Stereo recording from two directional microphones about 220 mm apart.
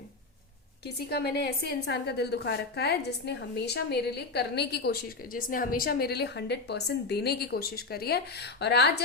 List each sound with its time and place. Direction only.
0.9 s a woman's voice: 45° left (ahead or behind)